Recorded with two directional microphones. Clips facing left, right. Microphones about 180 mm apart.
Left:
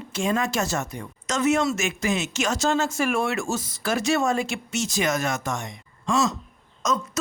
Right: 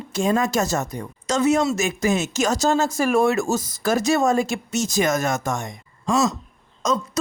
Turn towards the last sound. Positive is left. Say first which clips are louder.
# right 3 dB
turn(degrees=-30)  # may be behind; listen again after turning